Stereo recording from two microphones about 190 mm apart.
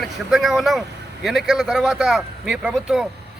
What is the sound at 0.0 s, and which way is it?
Speech, centre (ahead or behind).